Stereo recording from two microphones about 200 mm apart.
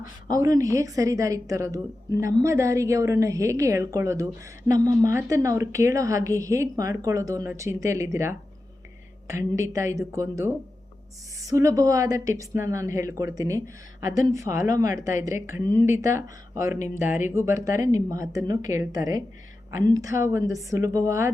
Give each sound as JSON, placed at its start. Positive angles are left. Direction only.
{"t": 0.3, "sound": "a woman's voice", "side_deg": -15}
{"t": 17.2, "sound": "a woman's voice", "side_deg": -15}